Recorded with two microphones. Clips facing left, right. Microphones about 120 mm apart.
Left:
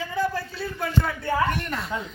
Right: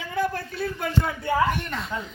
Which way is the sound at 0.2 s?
55° right (ahead or behind).